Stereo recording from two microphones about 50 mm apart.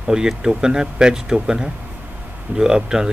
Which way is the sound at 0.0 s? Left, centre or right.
Centre.